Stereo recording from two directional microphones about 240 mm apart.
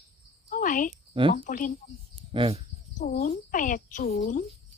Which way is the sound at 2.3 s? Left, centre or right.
Right.